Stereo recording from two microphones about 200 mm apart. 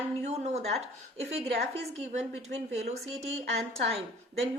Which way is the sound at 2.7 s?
35° right (ahead or behind).